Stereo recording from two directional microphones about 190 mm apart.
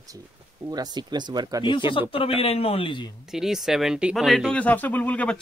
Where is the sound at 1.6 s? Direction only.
25° left (ahead or behind).